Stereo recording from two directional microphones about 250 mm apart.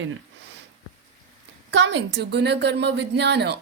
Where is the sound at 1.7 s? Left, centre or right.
Right.